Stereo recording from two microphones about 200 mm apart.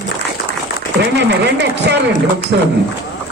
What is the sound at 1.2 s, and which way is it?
Speech, 60° right (ahead or behind).